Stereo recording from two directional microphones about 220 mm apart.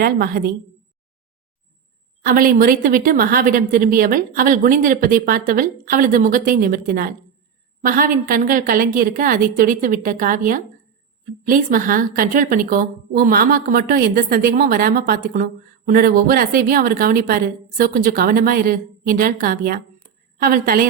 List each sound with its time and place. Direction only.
0.0 s a woman's voice: 45° right (ahead or behind)
2.2 s a woman's voice: 40° right (ahead or behind)